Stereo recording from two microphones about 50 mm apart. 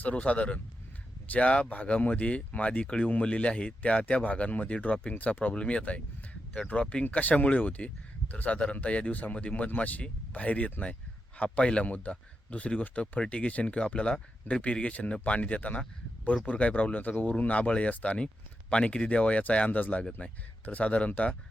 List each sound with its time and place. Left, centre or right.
0.0 s speech: left